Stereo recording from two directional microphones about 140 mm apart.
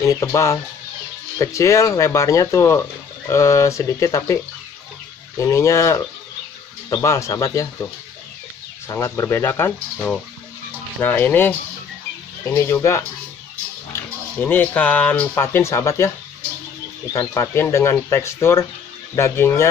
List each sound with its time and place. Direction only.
0.0 s speech: 25° left (ahead or behind)
5.4 s speech: 20° left (ahead or behind)
17.1 s speech: 20° left (ahead or behind)